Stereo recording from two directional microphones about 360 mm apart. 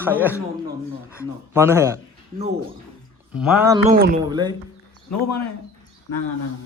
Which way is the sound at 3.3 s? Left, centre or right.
Centre.